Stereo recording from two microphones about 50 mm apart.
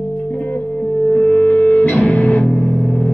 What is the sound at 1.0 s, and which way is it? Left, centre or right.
Music, left.